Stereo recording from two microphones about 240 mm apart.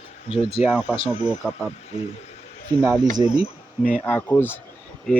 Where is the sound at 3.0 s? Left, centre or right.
Centre.